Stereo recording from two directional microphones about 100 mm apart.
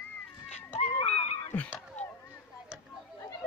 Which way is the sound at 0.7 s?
85° left.